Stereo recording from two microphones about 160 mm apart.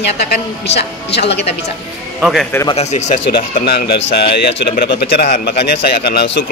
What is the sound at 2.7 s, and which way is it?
Speech, 45° left (ahead or behind).